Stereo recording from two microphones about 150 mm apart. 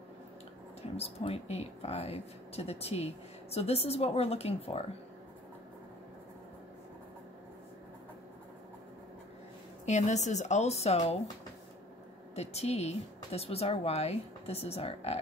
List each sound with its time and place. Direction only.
0.9 s speech: 40° left (ahead or behind)
9.8 s speech: 50° left (ahead or behind)
12.4 s speech: 45° left (ahead or behind)